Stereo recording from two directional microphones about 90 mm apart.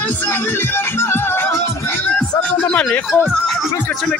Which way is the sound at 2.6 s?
15° left (ahead or behind).